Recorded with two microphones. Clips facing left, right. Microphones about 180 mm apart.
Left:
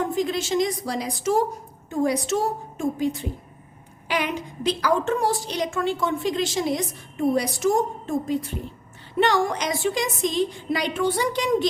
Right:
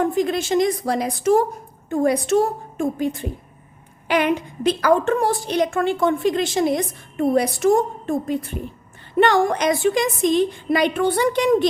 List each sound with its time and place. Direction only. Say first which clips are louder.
0.0 s a woman's voice: right 4 dB; 55° right (ahead or behind)